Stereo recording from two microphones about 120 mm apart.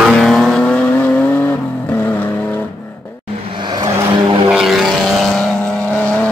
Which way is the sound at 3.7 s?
40° right (ahead or behind).